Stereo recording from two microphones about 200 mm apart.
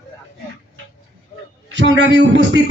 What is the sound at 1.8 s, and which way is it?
Music, 60° right (ahead or behind).